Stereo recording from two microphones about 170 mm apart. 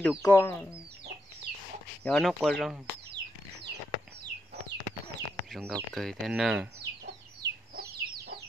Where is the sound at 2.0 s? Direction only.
5° left (ahead or behind).